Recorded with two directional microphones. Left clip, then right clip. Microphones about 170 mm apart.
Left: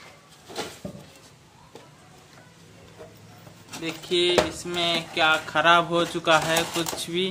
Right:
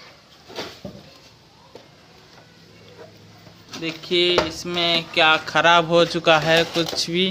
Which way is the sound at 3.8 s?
40° right (ahead or behind).